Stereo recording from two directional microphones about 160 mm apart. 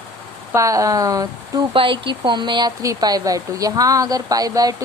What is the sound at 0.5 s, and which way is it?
Speech, 20° right (ahead or behind).